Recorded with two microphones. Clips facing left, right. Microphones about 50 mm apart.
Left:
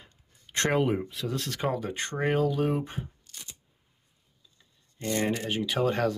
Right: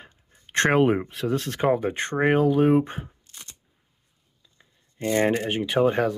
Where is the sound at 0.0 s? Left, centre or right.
Right.